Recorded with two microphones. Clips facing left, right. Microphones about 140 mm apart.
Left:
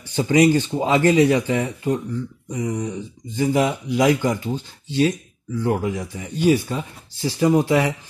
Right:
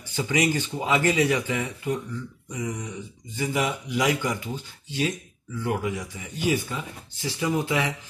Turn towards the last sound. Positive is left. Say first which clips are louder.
# left 8 dB
turn(degrees=35)  # may be behind; listen again after turning